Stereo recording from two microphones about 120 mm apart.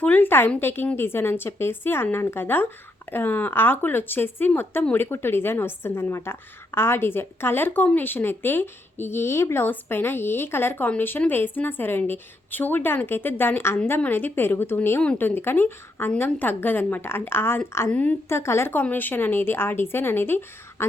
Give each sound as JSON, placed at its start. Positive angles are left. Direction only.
{"t": 0.0, "sound": "speech", "side_deg": 15}